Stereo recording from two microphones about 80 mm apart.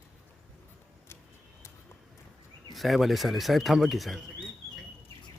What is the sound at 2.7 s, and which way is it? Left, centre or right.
Speech, centre.